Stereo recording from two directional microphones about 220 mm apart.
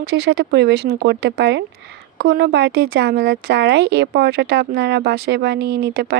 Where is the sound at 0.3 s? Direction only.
50° right (ahead or behind).